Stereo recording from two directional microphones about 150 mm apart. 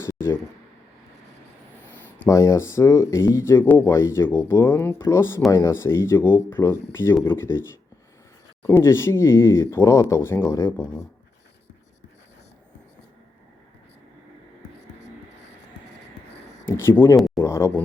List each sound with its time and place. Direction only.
0.0 s a sound: 15° left (ahead or behind)
2.2 s speech: 20° left (ahead or behind)
16.6 s speech: 15° left (ahead or behind)